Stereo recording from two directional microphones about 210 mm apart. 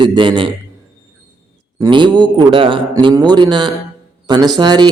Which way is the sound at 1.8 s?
20° right (ahead or behind).